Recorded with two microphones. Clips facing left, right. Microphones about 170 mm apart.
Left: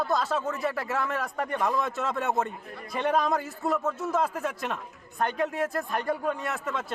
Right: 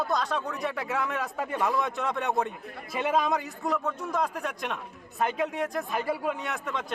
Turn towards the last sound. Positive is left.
turn(degrees=0)  # may be behind; listen again after turning